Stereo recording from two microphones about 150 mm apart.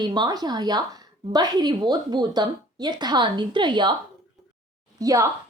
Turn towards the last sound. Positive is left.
turn(degrees=-25)  # may be behind; listen again after turning